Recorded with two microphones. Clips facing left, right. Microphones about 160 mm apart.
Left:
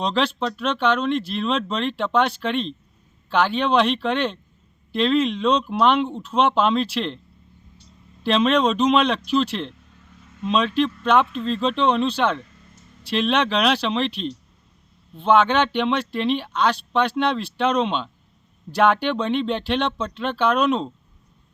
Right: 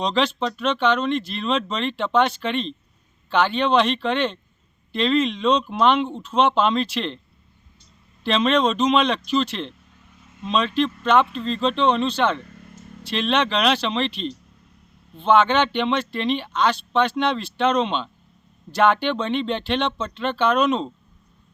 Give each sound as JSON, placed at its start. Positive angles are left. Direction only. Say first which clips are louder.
{"t": 0.0, "sound": "speech", "louder": "even", "side_deg": 5}
{"t": 8.2, "sound": "speech", "louder": "left 1 dB", "side_deg": 5}
{"t": 12.5, "sound": "a sound", "louder": "right 8 dB", "side_deg": -60}
{"t": 13.1, "sound": "speech", "louder": "left 1 dB", "side_deg": 5}